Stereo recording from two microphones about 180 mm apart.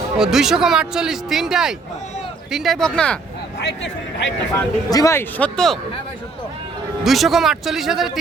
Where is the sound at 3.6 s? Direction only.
80° left.